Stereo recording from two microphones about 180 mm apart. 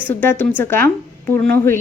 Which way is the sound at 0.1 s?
10° left (ahead or behind).